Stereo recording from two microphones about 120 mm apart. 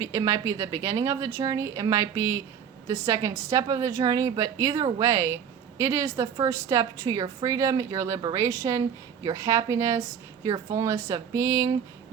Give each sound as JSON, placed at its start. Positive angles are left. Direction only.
{"t": 0.0, "sound": "a woman's voice", "side_deg": -25}